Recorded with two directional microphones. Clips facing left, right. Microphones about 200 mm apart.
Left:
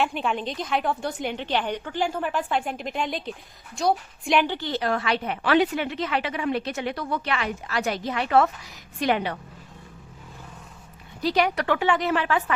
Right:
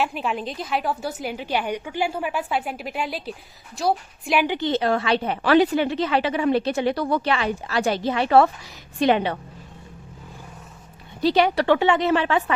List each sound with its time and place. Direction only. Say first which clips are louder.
0.0 s a woman's voice: even; 5° right (ahead or behind)
4.4 s a woman's voice: right 5 dB; 20° right (ahead or behind)
11.2 s a woman's voice: right 4 dB; 25° right (ahead or behind)